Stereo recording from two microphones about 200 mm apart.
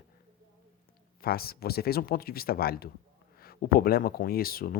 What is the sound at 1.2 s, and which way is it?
Speech, 50° left (ahead or behind).